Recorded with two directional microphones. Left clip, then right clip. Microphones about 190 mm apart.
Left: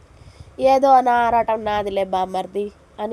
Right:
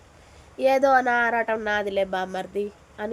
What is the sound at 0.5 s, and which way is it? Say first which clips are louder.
A woman's voice: left 5 dB; 10° left (ahead or behind).